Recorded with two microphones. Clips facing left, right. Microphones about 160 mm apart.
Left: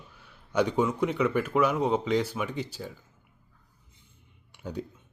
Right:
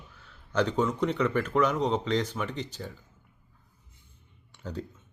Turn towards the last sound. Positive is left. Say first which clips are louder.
# left 2 dB
turn(degrees=10)  # may be behind; listen again after turning